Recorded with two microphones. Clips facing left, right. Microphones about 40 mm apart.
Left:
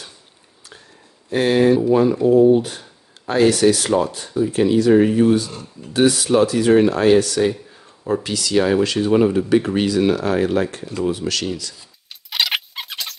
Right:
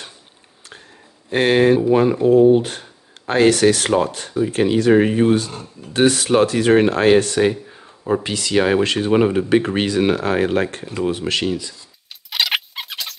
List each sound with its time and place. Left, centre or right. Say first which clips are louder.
1.3 s speech: right 1 dB; right
11.3 s speech: right 3 dB; right
12.3 s a sound: right 1 dB; centre